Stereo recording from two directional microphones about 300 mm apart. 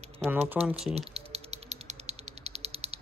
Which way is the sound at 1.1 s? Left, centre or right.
Right.